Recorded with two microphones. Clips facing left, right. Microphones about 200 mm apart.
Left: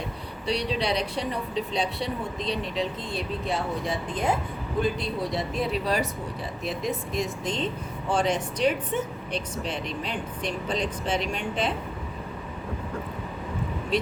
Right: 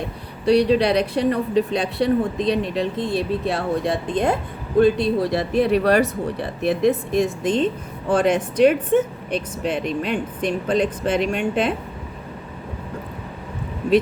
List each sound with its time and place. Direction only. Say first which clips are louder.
0.4 s speech: right 11 dB; 55° right (ahead or behind)